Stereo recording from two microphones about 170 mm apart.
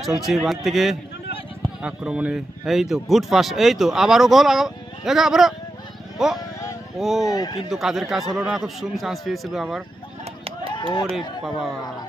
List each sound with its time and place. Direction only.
0.0 s a man's voice: centre (ahead or behind)
7.0 s a man's voice: centre (ahead or behind)
7.2 s speech: 20° left (ahead or behind)
7.7 s a man's voice: centre (ahead or behind)
10.7 s chop: 25° left (ahead or behind)